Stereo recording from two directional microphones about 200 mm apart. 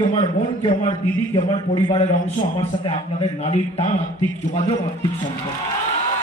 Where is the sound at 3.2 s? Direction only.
30° left (ahead or behind).